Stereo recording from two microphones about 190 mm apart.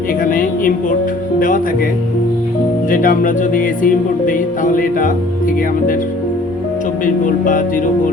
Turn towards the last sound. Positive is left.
turn(degrees=45)  # may be behind; listen again after turning